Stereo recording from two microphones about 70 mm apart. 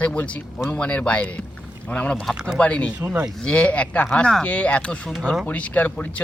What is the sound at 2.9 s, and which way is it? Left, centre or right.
Speech, right.